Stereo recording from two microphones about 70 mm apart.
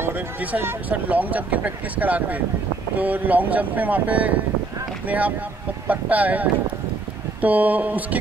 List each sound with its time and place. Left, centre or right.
0.4 s speech: right
5.9 s a sound: right
7.4 s speech: right